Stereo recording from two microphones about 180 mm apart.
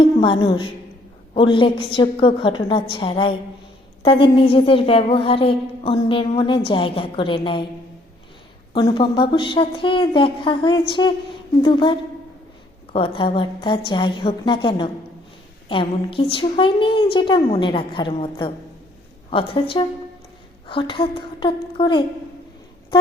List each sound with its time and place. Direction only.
0.0 s a woman's voice: 25° left (ahead or behind)
8.7 s speech: 25° left (ahead or behind)